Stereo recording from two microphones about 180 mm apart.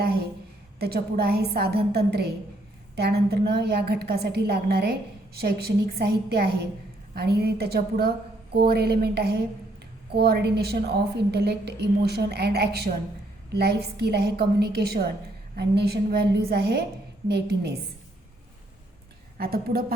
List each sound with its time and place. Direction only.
0.8 s a woman's voice: 60° right (ahead or behind)
19.4 s a woman's voice: 55° right (ahead or behind)